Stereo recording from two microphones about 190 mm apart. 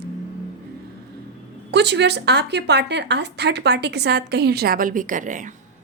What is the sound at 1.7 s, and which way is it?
A woman's voice, 65° right (ahead or behind).